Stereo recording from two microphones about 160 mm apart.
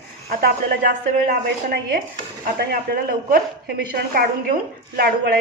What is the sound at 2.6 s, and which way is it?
A woman's voice, 70° right (ahead or behind).